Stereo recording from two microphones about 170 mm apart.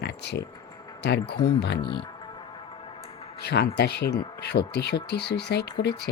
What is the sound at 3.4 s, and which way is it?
Speech, 75° left (ahead or behind).